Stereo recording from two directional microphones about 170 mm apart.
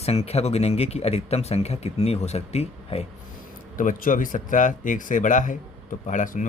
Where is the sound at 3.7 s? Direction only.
50° left (ahead or behind).